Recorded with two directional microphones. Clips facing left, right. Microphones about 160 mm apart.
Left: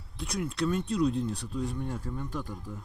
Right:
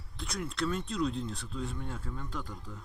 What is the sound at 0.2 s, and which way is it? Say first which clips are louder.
Speech: left 4 dB; 10° left (ahead or behind).